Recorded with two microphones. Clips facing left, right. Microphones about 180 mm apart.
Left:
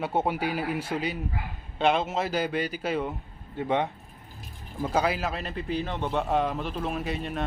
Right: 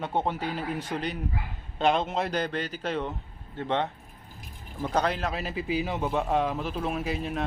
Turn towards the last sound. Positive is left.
turn(degrees=0)  # may be behind; listen again after turning